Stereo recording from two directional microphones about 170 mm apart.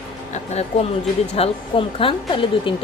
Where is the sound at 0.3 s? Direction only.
40° left (ahead or behind).